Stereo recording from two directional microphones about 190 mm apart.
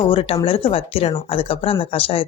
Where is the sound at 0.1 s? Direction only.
30° left (ahead or behind).